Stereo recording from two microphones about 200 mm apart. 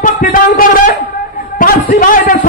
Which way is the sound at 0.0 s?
40° left (ahead or behind).